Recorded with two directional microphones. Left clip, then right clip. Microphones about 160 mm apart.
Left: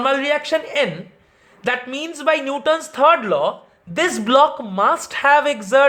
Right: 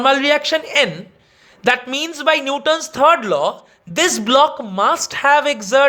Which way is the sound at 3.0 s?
40° right (ahead or behind).